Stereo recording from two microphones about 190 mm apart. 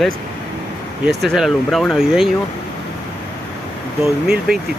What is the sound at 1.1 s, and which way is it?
Speech, centre (ahead or behind).